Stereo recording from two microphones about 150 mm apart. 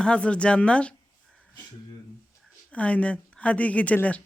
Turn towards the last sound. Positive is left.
turn(degrees=10)  # may be behind; listen again after turning